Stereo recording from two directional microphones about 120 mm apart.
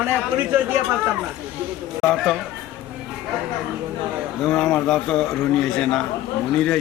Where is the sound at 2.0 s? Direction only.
5° left (ahead or behind).